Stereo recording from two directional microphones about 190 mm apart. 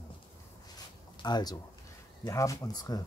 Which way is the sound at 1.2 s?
20° left (ahead or behind).